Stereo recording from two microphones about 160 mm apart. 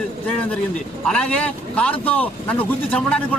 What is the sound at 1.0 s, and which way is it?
Speech, 5° left (ahead or behind).